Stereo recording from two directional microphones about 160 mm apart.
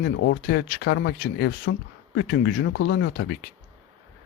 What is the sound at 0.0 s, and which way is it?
A man's voice, 90° left.